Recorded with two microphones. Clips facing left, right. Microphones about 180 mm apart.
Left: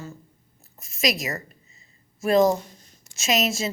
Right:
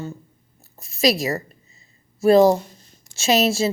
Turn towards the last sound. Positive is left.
turn(degrees=-30)  # may be behind; listen again after turning